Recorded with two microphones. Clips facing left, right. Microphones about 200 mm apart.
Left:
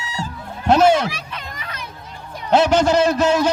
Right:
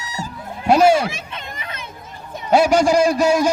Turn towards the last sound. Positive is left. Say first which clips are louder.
# right 1 dB
turn(degrees=-10)  # may be behind; listen again after turning